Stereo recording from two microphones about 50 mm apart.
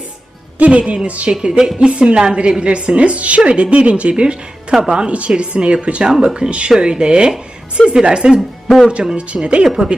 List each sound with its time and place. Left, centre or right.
0.6 s a woman's voice: right
1.4 s a woman's voice: centre
9.6 s speech: centre